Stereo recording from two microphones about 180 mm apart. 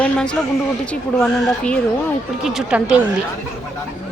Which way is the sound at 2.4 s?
5° right (ahead or behind).